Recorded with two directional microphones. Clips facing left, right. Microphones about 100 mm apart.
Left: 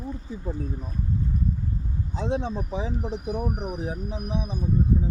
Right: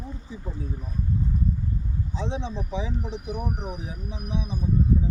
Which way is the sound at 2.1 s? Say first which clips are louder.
Left 4 dB; 50° left (ahead or behind).